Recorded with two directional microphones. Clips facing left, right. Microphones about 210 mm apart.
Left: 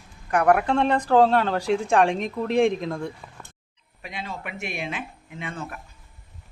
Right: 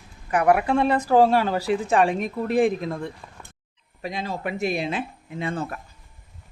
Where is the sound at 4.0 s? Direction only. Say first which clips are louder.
Right 6 dB; 40° right (ahead or behind).